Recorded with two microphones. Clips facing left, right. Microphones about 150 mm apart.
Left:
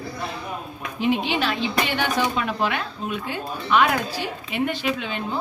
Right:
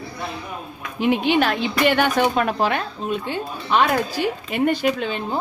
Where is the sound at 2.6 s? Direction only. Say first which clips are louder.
Right 3 dB; 40° right (ahead or behind).